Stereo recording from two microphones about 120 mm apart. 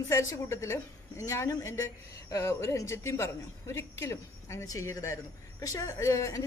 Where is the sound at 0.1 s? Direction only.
25° left (ahead or behind).